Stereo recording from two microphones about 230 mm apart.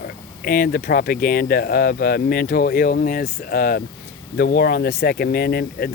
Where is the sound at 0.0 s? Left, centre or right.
Left.